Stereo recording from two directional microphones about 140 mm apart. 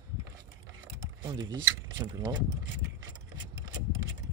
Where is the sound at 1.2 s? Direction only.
30° right (ahead or behind).